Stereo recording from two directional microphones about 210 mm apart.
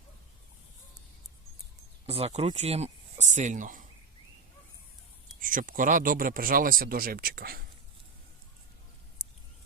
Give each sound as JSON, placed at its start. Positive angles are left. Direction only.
{"t": 2.0, "sound": "speech", "side_deg": -30}
{"t": 5.4, "sound": "speech", "side_deg": -40}